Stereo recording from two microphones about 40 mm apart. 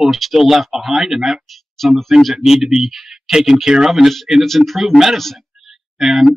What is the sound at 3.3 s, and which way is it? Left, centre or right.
Speech, centre.